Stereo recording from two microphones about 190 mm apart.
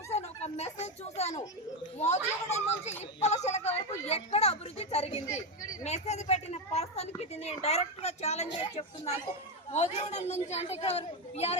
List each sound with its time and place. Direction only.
0.1 s a sound: 35° left (ahead or behind)
2.0 s a woman's voice: 35° left (ahead or behind)
9.7 s speech: 35° left (ahead or behind)